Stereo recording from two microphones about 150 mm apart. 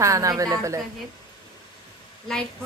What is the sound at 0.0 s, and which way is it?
Speech, 20° right (ahead or behind).